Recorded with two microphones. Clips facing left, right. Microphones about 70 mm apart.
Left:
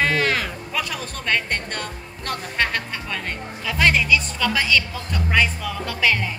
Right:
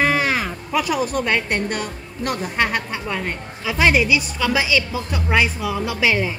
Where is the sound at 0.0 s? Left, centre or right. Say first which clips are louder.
Right 2 dB; centre.